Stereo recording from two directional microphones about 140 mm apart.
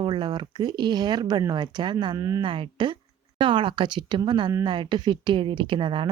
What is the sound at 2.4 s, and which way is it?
A woman's voice, 35° right (ahead or behind).